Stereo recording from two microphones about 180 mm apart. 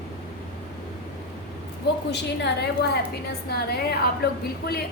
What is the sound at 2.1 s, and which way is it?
Speech, 70° left (ahead or behind).